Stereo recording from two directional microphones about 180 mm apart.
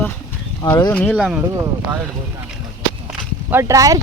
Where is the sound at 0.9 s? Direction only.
10° left (ahead or behind).